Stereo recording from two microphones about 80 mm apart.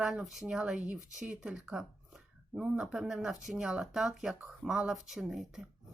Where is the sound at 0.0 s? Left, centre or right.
Centre.